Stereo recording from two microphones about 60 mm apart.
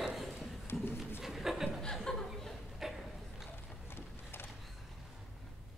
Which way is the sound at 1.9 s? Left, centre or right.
Centre.